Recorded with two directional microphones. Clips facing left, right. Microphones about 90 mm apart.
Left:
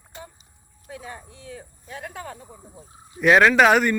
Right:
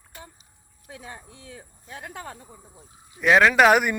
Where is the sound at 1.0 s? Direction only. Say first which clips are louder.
Left 1 dB; 20° right (ahead or behind).